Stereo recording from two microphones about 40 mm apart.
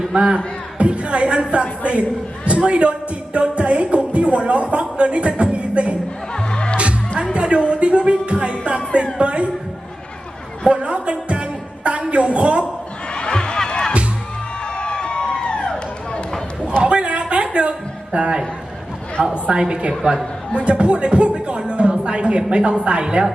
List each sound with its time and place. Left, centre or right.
0.1 s a man's voice: right
6.3 s music: left
7.3 s music: right
10.7 s music: right
13.1 s music: left
14.8 s a sound: left
16.8 s a sound: right
19.2 s speech: right